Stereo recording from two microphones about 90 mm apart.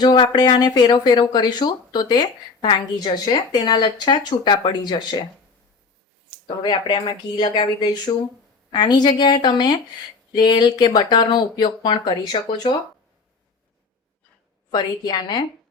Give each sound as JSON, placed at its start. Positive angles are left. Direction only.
{"t": 0.0, "sound": "speech", "side_deg": 50}
{"t": 6.6, "sound": "speech", "side_deg": 60}
{"t": 14.7, "sound": "speech", "side_deg": 50}